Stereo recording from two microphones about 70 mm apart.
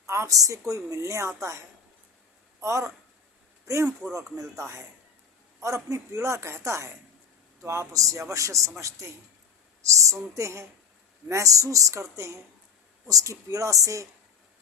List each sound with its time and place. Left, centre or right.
0.1 s a man's voice: right
4.0 s a man's voice: right